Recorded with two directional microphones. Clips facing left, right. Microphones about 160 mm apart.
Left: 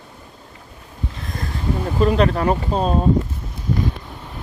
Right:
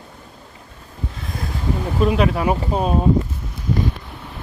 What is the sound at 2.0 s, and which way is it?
Speech, 5° right (ahead or behind).